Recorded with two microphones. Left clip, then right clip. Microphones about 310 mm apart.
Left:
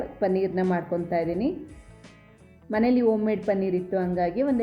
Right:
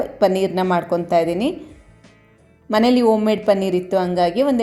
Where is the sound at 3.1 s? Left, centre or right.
Centre.